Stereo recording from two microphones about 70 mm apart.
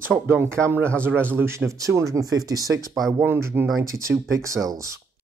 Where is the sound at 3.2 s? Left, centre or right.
Right.